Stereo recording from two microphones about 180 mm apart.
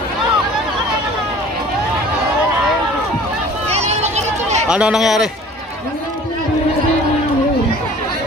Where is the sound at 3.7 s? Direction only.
35° right (ahead or behind).